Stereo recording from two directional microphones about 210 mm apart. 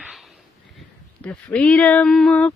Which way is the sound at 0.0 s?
Centre (ahead or behind).